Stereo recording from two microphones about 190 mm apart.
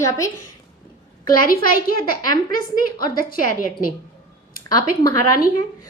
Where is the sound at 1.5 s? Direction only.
50° left (ahead or behind).